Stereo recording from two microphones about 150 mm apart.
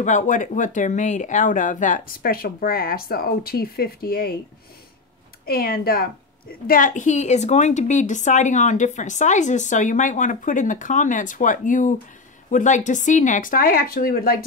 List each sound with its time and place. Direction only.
0.0 s speech: 55° left (ahead or behind); by 4.4 s 90° left
5.4 s speech: 80° left
6.7 s a woman's voice: 60° left (ahead or behind); by 14.4 s 90° left